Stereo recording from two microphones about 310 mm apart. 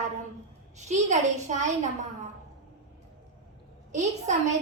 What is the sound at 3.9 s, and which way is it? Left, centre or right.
Speech, right.